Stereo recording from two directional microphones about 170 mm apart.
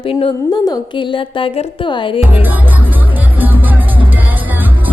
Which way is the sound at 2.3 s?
10° right (ahead or behind).